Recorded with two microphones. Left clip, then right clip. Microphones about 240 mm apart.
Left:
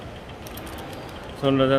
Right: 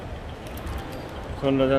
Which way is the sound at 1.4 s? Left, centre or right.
Centre.